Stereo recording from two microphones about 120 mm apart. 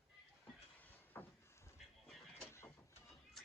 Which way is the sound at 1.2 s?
20° left (ahead or behind).